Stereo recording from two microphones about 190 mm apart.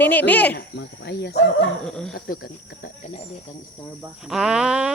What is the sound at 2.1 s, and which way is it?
Speech, 50° left (ahead or behind).